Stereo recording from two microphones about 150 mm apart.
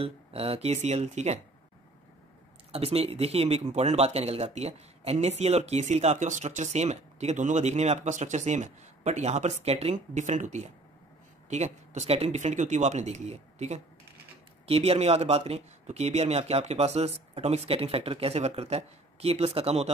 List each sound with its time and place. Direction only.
0.0 s speech: 40° right (ahead or behind)
2.7 s speech: 40° right (ahead or behind)